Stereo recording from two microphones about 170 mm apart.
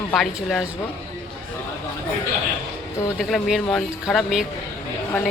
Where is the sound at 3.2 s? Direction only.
Centre (ahead or behind).